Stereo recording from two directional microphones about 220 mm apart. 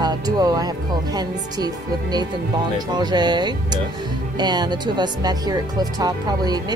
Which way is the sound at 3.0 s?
20° right (ahead or behind).